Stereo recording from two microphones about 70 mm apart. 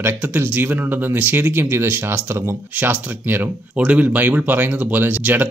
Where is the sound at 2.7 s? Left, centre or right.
Right.